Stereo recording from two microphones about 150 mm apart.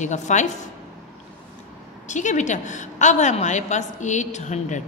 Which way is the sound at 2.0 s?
55° left (ahead or behind).